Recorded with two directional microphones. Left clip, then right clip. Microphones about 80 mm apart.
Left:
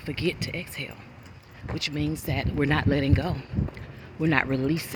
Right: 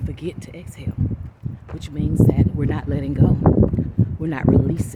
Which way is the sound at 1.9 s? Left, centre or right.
Right.